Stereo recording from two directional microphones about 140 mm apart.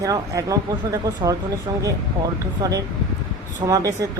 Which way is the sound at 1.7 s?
20° right (ahead or behind).